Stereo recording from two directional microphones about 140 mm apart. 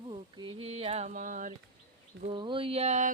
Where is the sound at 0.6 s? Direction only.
45° right (ahead or behind); by 1.5 s 65° right (ahead or behind).